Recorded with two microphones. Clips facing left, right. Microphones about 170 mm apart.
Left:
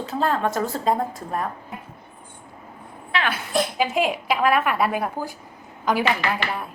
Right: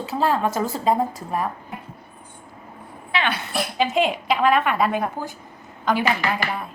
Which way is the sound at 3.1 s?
Centre (ahead or behind).